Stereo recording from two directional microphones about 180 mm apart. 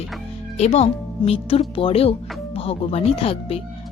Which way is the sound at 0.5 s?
35° left (ahead or behind).